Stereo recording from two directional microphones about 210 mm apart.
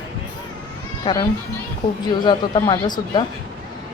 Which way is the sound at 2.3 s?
20° left (ahead or behind).